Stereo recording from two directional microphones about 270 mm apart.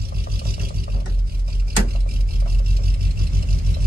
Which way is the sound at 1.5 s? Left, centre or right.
Right.